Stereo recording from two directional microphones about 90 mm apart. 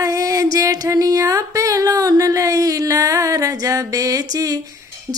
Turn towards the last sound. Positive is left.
turn(degrees=-40)  # may be behind; listen again after turning